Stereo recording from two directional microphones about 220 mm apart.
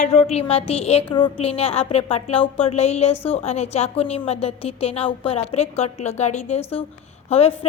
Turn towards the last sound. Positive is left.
turn(degrees=25)  # may be behind; listen again after turning